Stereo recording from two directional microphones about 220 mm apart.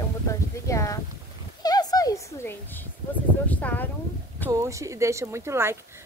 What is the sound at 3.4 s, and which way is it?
Speech, 5° left (ahead or behind).